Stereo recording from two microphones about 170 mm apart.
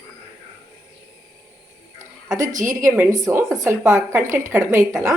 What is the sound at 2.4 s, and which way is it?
Speech, 50° right (ahead or behind).